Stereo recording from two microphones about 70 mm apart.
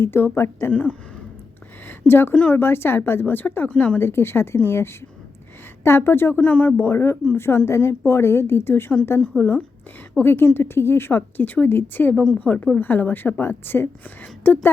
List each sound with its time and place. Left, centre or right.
0.0 s a woman's voice: left
0.7 s a woman's voice: centre
1.9 s a sound: left
2.3 s speech: centre
2.6 s a woman's voice: left
4.0 s a woman's voice: left
6.4 s a woman's voice: left
6.8 s a woman's voice: left